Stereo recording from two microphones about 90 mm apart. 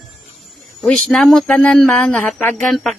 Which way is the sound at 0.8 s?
5° left (ahead or behind).